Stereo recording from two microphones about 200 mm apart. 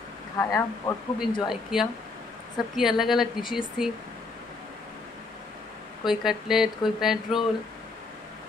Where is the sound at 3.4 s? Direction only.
25° left (ahead or behind).